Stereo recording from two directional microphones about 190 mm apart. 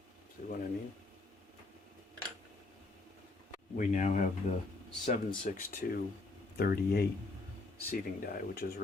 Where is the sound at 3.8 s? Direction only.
40° left (ahead or behind).